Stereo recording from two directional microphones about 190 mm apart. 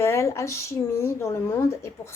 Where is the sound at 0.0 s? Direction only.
15° left (ahead or behind).